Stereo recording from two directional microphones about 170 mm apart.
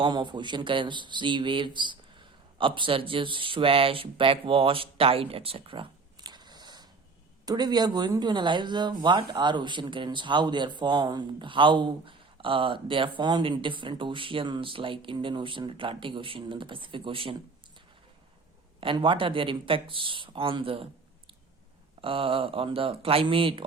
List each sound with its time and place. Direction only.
0.0 s speech: 25° right (ahead or behind)
18.8 s speech: 30° right (ahead or behind)
22.0 s speech: 30° right (ahead or behind)